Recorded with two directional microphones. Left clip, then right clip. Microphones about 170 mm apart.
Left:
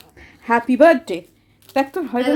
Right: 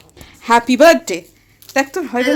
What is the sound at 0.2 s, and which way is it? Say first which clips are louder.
Speech: right 5 dB; 5° right (ahead or behind).